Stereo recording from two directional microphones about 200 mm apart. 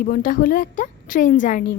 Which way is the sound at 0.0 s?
45° left (ahead or behind).